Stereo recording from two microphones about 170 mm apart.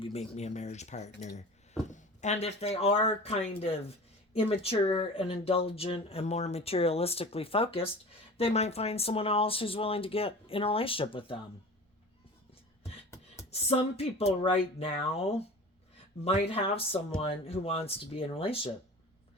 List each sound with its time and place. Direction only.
0.0 s speech: 40° left (ahead or behind)
13.5 s speech: 35° left (ahead or behind)
16.5 s speech: 35° left (ahead or behind)